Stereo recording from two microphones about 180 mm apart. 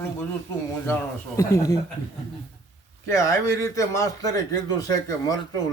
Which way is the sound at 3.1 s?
15° left (ahead or behind).